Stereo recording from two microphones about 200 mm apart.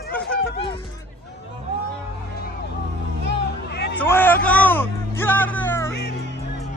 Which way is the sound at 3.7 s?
60° left (ahead or behind).